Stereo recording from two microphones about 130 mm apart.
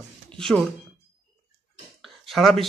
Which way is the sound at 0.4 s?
Centre (ahead or behind).